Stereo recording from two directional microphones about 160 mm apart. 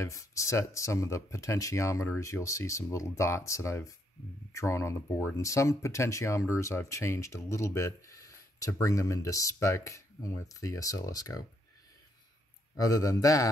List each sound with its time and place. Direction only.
0.0 s speech: 20° left (ahead or behind)
12.7 s speech: 20° left (ahead or behind)